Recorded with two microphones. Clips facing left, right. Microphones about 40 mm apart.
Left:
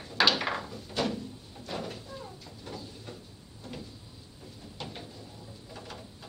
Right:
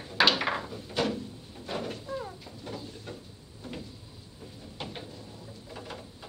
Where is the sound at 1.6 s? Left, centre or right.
Centre.